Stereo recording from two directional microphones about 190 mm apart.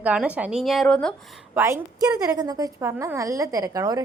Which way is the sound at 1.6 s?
15° right (ahead or behind).